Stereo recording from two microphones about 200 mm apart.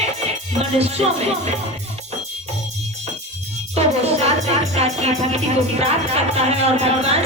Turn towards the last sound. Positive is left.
turn(degrees=-30)  # may be behind; listen again after turning